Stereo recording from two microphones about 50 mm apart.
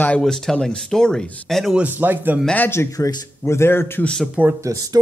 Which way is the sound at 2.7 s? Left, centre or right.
Left.